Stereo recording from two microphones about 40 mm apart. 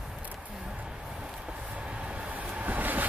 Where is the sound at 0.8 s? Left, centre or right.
Centre.